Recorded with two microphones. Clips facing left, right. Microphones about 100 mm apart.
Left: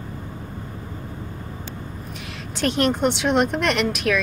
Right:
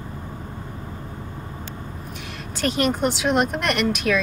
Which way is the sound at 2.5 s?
Centre (ahead or behind).